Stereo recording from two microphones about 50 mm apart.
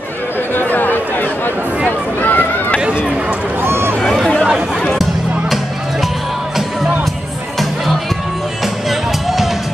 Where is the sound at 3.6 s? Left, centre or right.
Right.